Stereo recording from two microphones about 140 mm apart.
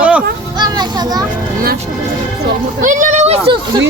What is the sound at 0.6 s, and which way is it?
Children playing, 30° right (ahead or behind).